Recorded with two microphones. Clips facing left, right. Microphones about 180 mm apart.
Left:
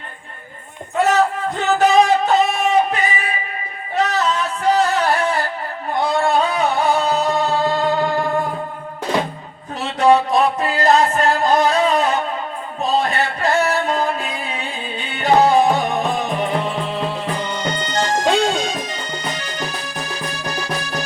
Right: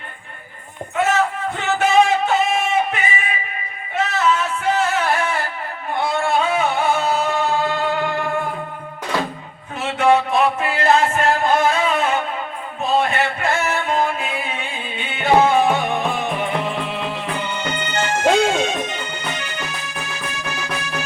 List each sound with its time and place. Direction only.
0.9 s a sound: 35° left (ahead or behind)
5.9 s music: 35° left (ahead or behind)
9.8 s music: 35° left (ahead or behind)